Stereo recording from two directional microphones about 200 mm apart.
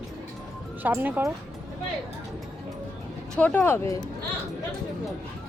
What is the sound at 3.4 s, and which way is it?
Speech, 10° left (ahead or behind).